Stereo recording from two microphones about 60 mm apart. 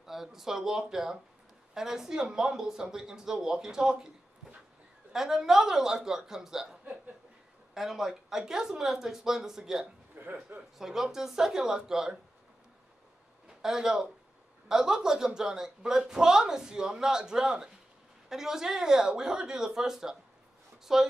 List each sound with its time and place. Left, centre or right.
0.0 s a woman's voice: centre
5.1 s a woman's voice: centre
10.2 s a sound: right
10.8 s a woman's voice: centre
13.5 s a woman's voice: centre